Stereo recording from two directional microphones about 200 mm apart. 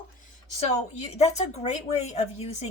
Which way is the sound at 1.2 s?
35° left (ahead or behind).